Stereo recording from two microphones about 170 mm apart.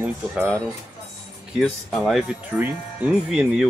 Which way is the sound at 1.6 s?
5° left (ahead or behind).